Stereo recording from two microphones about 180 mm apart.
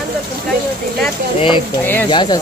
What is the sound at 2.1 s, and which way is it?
Speech, 25° left (ahead or behind).